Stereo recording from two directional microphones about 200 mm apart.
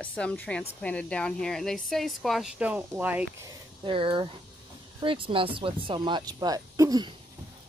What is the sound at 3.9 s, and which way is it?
Speech, 25° right (ahead or behind).